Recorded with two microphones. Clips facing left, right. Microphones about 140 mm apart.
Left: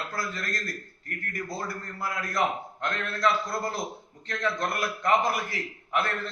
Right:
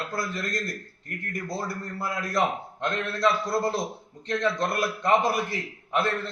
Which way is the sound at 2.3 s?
20° right (ahead or behind).